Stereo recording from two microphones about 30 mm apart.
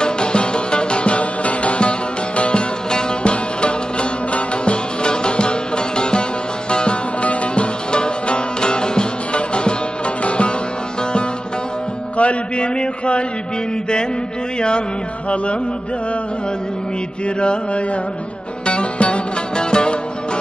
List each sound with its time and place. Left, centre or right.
0.0 s music: left
12.2 s a sound: left
17.4 s mantra: left
18.7 s music: left